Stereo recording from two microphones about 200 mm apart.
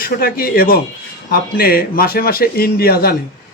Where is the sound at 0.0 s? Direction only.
50° left (ahead or behind).